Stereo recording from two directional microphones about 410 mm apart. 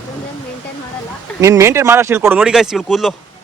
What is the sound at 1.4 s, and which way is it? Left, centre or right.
Speech, centre.